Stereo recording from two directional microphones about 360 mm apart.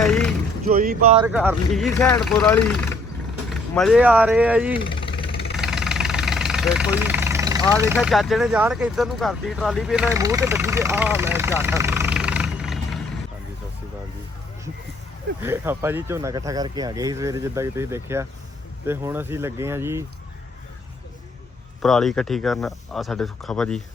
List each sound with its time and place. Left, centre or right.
0.0 s vehicle: centre
0.7 s speech: right
1.2 s speech: centre
5.5 s vehicle: centre
7.8 s speech: centre
15.4 s speech: centre
21.8 s speech: centre